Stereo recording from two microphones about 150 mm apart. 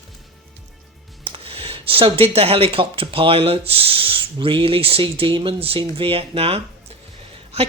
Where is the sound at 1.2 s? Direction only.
40° right (ahead or behind).